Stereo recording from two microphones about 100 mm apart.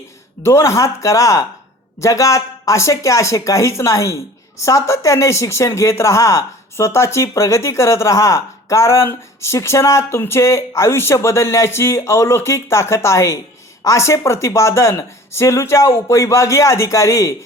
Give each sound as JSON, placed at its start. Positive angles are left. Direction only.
{"t": 0.4, "sound": "a woman's voice", "side_deg": 30}